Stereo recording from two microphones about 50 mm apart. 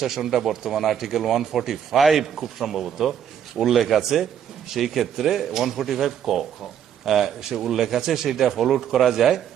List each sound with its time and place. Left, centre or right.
0.0 s speech: centre